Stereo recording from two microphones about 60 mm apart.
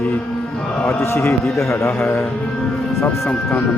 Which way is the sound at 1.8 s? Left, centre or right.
Left.